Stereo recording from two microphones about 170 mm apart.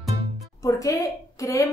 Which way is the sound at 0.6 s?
20° left (ahead or behind).